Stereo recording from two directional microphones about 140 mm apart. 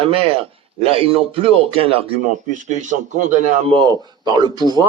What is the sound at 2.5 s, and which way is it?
A man's voice, 60° right (ahead or behind).